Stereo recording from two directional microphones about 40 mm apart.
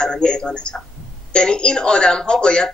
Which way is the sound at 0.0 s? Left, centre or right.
Left.